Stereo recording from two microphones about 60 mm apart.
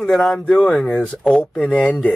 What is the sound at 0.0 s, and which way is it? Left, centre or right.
Speech, centre.